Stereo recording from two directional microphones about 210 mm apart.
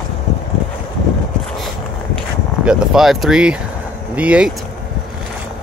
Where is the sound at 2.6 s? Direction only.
5° right (ahead or behind).